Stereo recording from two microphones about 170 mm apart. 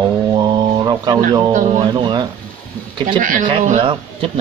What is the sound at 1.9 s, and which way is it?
Speech, 25° right (ahead or behind).